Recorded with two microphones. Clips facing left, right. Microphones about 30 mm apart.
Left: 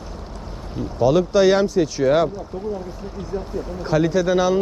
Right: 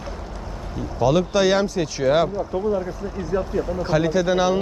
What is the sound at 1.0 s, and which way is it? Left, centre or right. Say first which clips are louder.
Speech: left 3 dB; centre.